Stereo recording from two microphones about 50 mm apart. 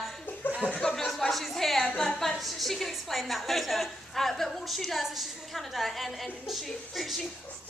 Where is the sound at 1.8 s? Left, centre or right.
Centre.